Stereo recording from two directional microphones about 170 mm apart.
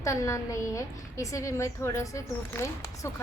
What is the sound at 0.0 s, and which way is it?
A woman's voice, 20° left (ahead or behind).